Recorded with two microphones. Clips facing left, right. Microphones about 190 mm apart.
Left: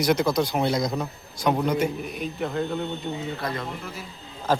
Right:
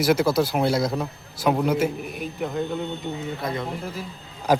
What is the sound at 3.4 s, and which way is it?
Speech, 20° right (ahead or behind).